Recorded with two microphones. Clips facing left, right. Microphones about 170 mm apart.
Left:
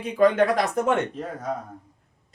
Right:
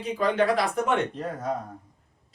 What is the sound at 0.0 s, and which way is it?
Speech, 50° left (ahead or behind).